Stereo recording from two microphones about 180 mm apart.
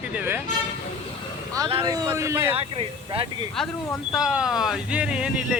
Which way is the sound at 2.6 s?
30° right (ahead or behind).